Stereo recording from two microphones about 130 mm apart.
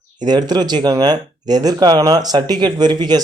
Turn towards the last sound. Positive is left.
turn(degrees=-35)  # may be behind; listen again after turning